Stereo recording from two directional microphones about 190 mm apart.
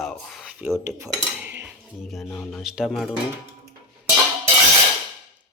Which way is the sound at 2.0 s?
5° left (ahead or behind).